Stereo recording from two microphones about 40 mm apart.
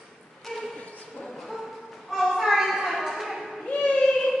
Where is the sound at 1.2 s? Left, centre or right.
Centre.